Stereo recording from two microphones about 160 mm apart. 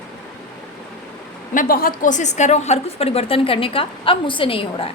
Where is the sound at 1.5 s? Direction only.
65° left (ahead or behind); by 4.9 s 35° left (ahead or behind).